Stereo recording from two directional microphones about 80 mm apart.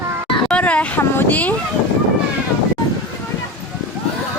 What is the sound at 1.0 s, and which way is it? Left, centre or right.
Speech, left.